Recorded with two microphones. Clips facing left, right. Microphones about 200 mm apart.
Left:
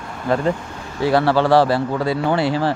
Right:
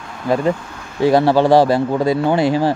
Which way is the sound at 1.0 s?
15° right (ahead or behind).